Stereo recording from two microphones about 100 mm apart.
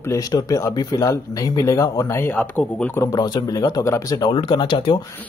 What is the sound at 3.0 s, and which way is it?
Speech, 40° left (ahead or behind).